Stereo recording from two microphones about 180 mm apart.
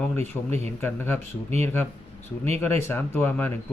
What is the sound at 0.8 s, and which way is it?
Speech, 10° left (ahead or behind).